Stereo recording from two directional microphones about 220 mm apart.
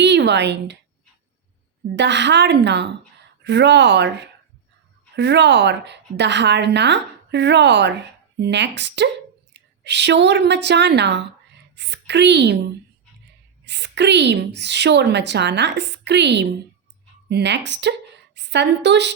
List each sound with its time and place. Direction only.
0.0 s a woman's voice: 50° right (ahead or behind)
2.0 s a woman's voice: 50° right (ahead or behind)
13.7 s a woman's voice: 50° right (ahead or behind)